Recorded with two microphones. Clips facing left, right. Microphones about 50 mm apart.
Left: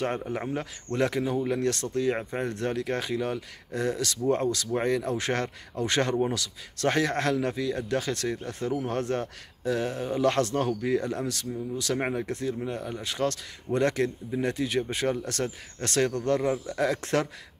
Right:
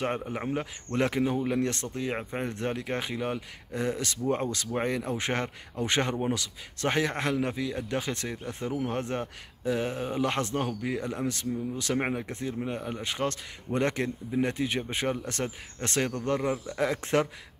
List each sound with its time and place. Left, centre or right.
0.0 s speech: centre